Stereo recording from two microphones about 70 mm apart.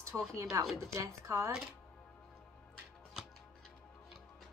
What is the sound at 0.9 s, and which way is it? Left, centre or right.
Speech, right.